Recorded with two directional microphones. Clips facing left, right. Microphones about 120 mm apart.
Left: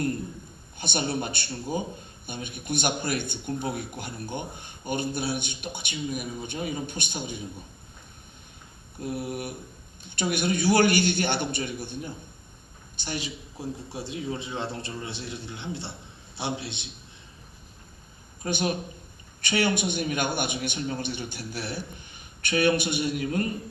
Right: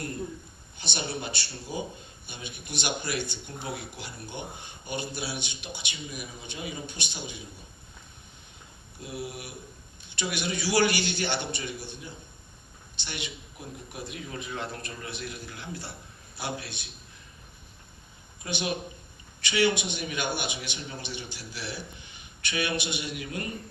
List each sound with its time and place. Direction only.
0.8 s speech: 50° left (ahead or behind)
9.0 s speech: 55° left (ahead or behind)
13.0 s a man's voice: 40° left (ahead or behind)
18.4 s speech: 45° left (ahead or behind)